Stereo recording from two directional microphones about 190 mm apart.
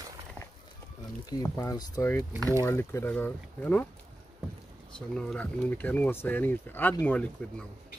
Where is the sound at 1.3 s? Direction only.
15° left (ahead or behind).